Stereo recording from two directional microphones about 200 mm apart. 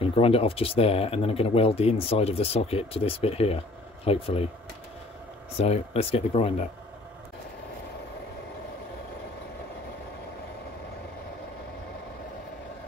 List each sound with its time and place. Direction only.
0.0 s speech: 30° left (ahead or behind)
5.6 s speech: 30° left (ahead or behind)